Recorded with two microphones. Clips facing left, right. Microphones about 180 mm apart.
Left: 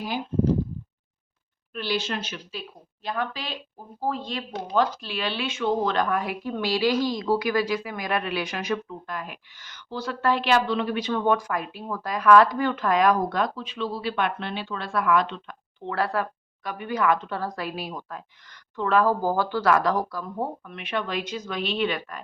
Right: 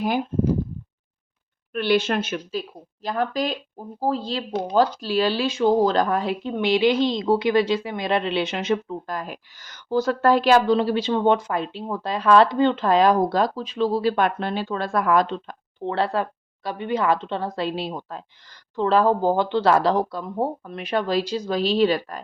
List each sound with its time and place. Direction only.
1.7 s a woman's voice: 60° right (ahead or behind); by 9.0 s 25° right (ahead or behind)
9.0 s a woman's voice: 40° right (ahead or behind)